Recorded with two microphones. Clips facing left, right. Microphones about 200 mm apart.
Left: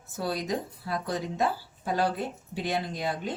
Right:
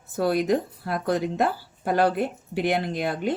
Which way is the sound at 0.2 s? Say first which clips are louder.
Right 8 dB; 60° right (ahead or behind).